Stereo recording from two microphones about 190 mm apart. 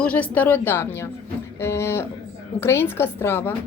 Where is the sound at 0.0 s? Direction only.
5° left (ahead or behind).